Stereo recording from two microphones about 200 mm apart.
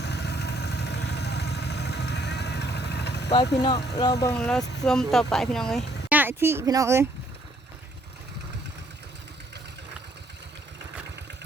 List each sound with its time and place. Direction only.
0.0 s vehicle: 55° left (ahead or behind)
3.9 s speech: 15° left (ahead or behind)
4.4 s speech: 5° left (ahead or behind)
6.1 s speech: 10° right (ahead or behind)